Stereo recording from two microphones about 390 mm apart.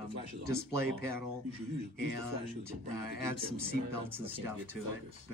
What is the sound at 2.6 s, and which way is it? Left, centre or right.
Speech, left.